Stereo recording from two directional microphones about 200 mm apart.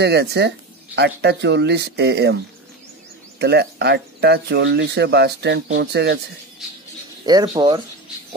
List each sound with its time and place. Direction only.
0.0 s speech: 55° right (ahead or behind)
7.2 s speech: 20° right (ahead or behind)